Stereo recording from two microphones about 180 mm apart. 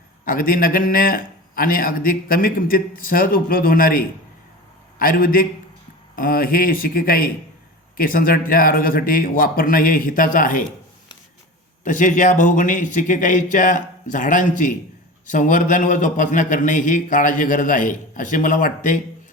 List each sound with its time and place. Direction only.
0.3 s a man's voice: 50° left (ahead or behind)
11.8 s a man's voice: 45° left (ahead or behind)